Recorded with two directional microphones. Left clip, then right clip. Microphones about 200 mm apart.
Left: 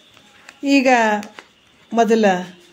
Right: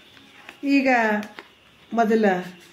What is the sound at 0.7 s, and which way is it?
Speech, 40° left (ahead or behind).